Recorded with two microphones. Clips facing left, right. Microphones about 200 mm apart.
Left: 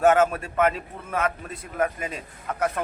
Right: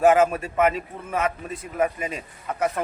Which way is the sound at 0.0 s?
5° right (ahead or behind).